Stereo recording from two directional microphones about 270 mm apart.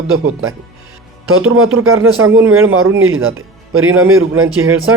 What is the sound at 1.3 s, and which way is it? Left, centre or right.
Speech, right.